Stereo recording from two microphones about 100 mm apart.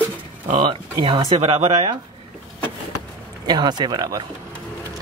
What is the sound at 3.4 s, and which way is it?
Speech, 45° right (ahead or behind).